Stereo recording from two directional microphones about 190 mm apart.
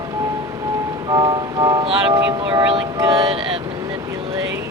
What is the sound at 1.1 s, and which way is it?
Music, 20° right (ahead or behind).